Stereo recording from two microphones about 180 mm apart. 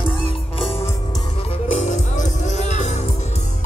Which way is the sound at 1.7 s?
45° left (ahead or behind).